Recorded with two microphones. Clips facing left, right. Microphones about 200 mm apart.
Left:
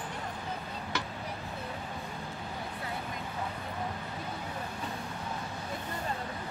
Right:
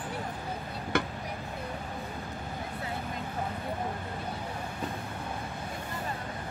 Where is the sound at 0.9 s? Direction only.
55° right (ahead or behind).